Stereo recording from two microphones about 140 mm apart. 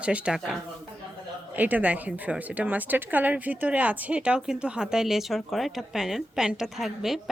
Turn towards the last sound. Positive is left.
turn(degrees=0)  # may be behind; listen again after turning